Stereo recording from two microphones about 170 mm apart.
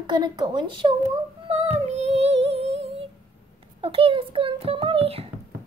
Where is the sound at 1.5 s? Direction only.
40° right (ahead or behind).